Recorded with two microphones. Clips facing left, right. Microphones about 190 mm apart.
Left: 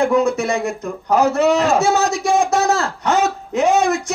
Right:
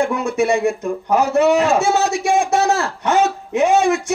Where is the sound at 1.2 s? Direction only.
40° left (ahead or behind).